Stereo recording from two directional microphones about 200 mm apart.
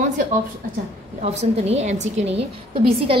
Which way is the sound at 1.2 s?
30° right (ahead or behind).